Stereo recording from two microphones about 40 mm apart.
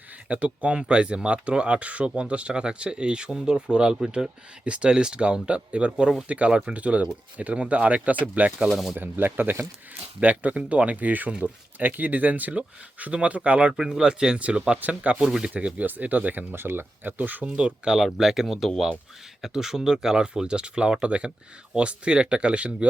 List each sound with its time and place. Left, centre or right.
0.3 s speech: right
0.7 s speech: right
8.7 s speech: centre
9.0 s speech: right
10.2 s speech: right
13.7 s speech: centre
14.3 s speech: right
14.8 s speech: right
15.1 s speech: centre
15.5 s speech: right
16.5 s speech: right
17.4 s speech: right
17.8 s speech: centre; by 22.9 s right